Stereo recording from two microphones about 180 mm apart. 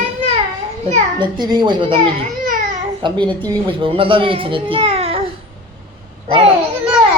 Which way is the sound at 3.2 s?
10° left (ahead or behind).